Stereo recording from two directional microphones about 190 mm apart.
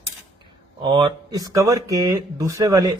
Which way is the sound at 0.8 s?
20° right (ahead or behind).